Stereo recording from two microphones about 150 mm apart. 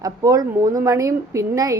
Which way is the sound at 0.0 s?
25° right (ahead or behind).